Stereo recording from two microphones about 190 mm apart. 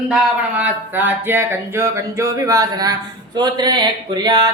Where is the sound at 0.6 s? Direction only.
10° right (ahead or behind).